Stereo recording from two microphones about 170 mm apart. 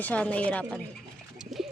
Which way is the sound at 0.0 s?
10° left (ahead or behind).